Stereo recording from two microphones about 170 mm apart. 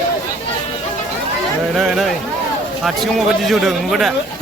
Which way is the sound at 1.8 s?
Centre (ahead or behind).